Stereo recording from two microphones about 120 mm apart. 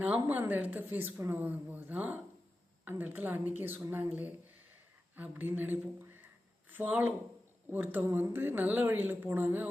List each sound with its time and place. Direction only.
0.0 s speech: 15° right (ahead or behind)
5.1 s speech: 15° right (ahead or behind)